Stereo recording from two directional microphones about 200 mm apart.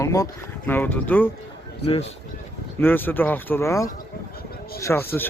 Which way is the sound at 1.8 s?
30° left (ahead or behind).